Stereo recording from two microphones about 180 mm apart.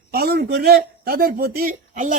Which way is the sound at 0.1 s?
60° right (ahead or behind).